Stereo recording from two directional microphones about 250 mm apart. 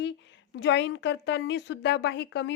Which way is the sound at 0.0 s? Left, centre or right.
Left.